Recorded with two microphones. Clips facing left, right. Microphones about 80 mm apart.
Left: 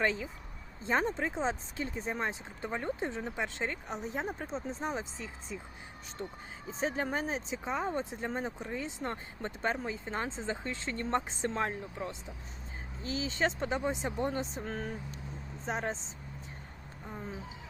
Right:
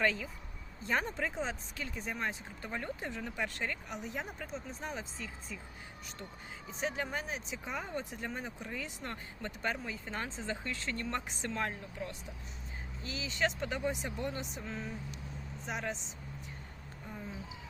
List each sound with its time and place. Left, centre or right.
0.0 s speech: left
6.7 s speech: left
14.6 s speech: left
15.6 s speech: left